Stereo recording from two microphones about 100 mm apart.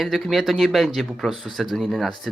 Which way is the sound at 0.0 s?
Centre (ahead or behind).